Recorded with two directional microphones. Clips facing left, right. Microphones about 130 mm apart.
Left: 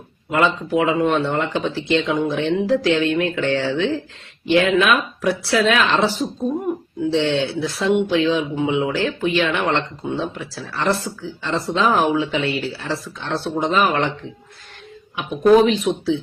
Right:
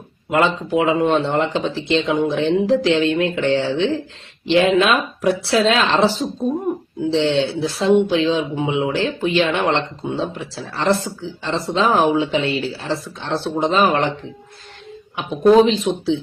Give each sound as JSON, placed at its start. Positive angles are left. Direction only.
{"t": 0.3, "sound": "speech", "side_deg": -25}
{"t": 15.4, "sound": "speech", "side_deg": -25}